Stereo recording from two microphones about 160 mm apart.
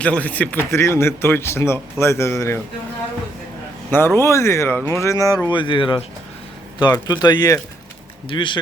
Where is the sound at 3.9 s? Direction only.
15° left (ahead or behind).